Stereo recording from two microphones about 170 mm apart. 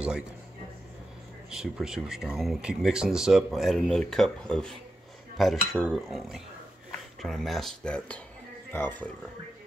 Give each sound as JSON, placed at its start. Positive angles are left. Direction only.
{"t": 1.5, "sound": "a man's voice", "side_deg": -5}